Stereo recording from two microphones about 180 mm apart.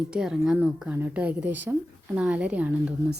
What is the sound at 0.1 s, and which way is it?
A woman's voice, 5° right (ahead or behind).